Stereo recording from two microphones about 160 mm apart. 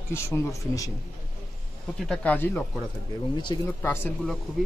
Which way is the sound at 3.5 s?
25° left (ahead or behind).